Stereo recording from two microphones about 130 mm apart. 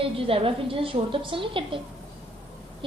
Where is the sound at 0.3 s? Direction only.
45° right (ahead or behind).